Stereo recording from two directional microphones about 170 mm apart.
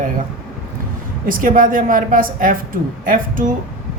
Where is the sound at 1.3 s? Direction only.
55° right (ahead or behind).